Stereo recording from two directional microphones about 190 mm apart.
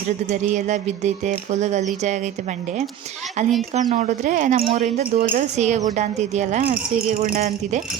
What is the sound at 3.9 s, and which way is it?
A woman's voice, 40° right (ahead or behind).